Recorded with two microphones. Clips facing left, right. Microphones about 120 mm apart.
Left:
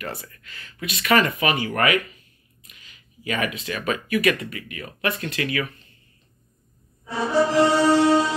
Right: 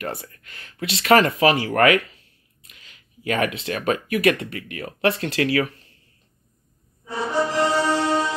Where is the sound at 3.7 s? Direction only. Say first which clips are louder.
Right 2 dB; 55° right (ahead or behind); by 5.8 s 80° right.